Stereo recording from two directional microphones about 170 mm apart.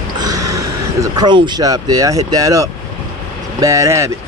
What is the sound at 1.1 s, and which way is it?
A man's voice, 25° right (ahead or behind).